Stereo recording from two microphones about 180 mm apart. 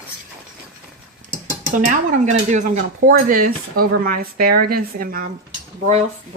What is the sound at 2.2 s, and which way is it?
Speech, 40° right (ahead or behind).